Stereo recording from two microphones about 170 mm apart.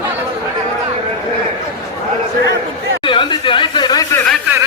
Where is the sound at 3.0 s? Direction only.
30° left (ahead or behind).